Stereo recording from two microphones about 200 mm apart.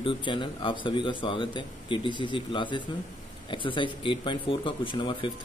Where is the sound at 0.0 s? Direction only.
25° left (ahead or behind).